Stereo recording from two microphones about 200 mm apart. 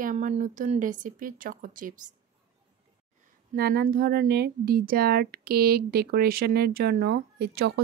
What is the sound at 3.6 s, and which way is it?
Speech, 50° right (ahead or behind).